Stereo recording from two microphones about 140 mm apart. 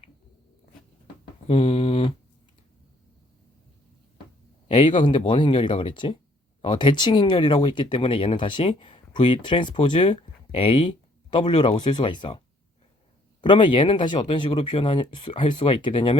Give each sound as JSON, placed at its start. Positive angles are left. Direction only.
{"t": 1.5, "sound": "a sound", "side_deg": 45}
{"t": 4.7, "sound": "speech", "side_deg": 35}
{"t": 13.4, "sound": "speech", "side_deg": 35}